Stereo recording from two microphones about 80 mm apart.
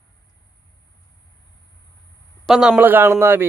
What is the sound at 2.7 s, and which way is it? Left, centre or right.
Speech, right.